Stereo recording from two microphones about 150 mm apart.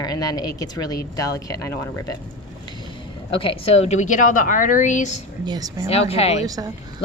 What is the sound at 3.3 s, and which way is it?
A woman's voice, 35° left (ahead or behind).